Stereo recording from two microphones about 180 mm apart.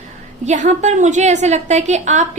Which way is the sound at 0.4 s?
40° right (ahead or behind).